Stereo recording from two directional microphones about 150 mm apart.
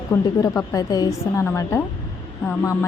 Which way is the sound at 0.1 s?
20° left (ahead or behind).